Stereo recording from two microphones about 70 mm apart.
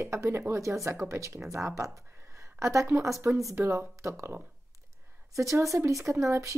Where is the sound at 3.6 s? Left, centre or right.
Right.